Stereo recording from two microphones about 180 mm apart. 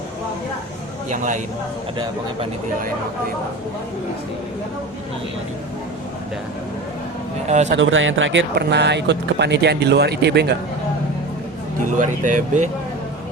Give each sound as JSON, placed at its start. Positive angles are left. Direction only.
{"t": 1.1, "sound": "speech", "side_deg": -45}
{"t": 7.4, "sound": "speech", "side_deg": -40}
{"t": 7.7, "sound": "speech", "side_deg": -90}
{"t": 11.9, "sound": "speech", "side_deg": -45}